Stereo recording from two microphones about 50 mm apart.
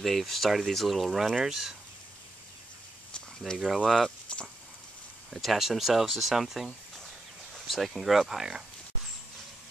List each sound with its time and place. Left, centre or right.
0.0 s speech: centre
3.5 s speech: centre
4.3 s a sound: centre
5.3 s speech: centre